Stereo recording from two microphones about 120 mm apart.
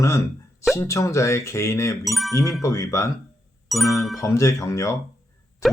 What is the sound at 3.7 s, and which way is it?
Speech, centre (ahead or behind).